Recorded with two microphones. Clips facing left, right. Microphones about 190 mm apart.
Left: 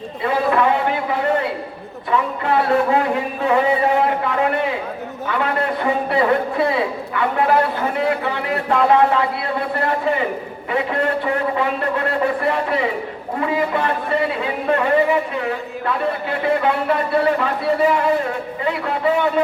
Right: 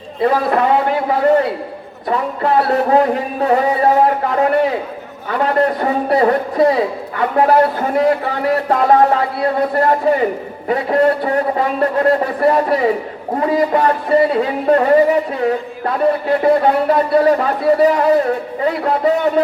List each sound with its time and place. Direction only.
0.2 s a man's voice: 40° right (ahead or behind)
2.0 s a man's voice: 40° right (ahead or behind)
16.4 s a man's voice: 40° right (ahead or behind)